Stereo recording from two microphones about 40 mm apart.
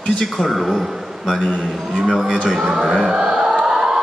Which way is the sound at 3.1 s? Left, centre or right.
Centre.